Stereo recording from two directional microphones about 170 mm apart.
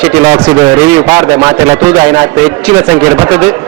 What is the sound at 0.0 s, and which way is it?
A man's voice, 10° right (ahead or behind).